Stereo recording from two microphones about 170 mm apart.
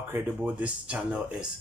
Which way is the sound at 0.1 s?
10° right (ahead or behind).